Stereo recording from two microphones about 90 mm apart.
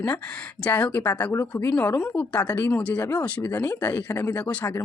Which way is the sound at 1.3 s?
30° left (ahead or behind).